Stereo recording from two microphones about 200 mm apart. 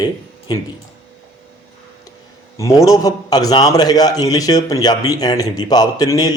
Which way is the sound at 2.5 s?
15° left (ahead or behind).